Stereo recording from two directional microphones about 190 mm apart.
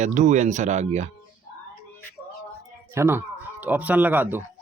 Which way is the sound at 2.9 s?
15° right (ahead or behind).